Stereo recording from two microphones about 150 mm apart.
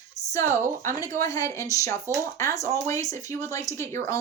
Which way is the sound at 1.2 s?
20° left (ahead or behind).